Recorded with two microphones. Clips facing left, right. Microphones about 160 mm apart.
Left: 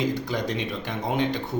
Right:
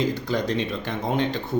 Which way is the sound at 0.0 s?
15° left (ahead or behind).